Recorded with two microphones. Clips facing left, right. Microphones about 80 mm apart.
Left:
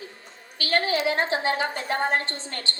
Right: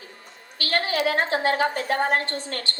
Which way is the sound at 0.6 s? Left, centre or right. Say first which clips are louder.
Even; left.